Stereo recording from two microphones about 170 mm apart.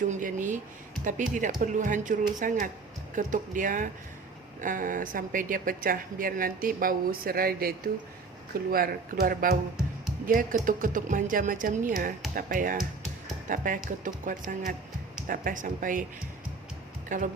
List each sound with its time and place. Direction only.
0.0 s a woman's voice: 50° right (ahead or behind)
17.1 s speech: 50° right (ahead or behind)